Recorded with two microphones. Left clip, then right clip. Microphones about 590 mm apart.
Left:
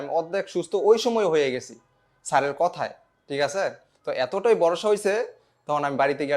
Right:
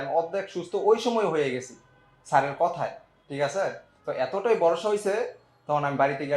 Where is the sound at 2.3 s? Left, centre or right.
Left.